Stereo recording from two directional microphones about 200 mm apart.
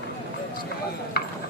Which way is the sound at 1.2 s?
55° left (ahead or behind).